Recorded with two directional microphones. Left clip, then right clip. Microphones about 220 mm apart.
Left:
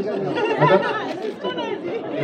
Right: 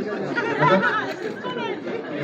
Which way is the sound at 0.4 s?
50° left (ahead or behind).